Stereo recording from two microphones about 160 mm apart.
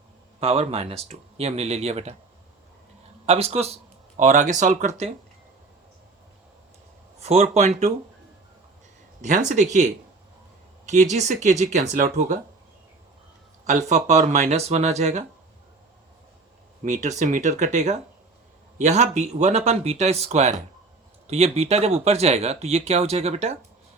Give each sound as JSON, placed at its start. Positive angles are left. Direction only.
{"t": 0.3, "sound": "speech", "side_deg": -40}
{"t": 3.2, "sound": "speech", "side_deg": -40}
{"t": 7.2, "sound": "speech", "side_deg": -40}
{"t": 9.2, "sound": "speech", "side_deg": -50}
{"t": 10.8, "sound": "speech", "side_deg": -45}
{"t": 13.7, "sound": "speech", "side_deg": -45}
{"t": 16.8, "sound": "speech", "side_deg": -45}